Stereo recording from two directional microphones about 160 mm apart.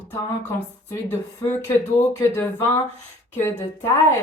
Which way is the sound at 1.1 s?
15° left (ahead or behind).